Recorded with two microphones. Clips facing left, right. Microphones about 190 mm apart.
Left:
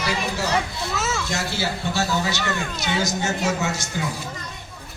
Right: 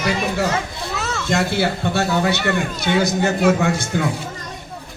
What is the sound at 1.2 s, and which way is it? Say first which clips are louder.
A woman's voice: right 7 dB; 60° right (ahead or behind).